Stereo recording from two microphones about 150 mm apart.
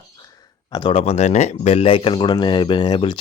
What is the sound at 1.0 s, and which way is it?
Speech, 45° left (ahead or behind).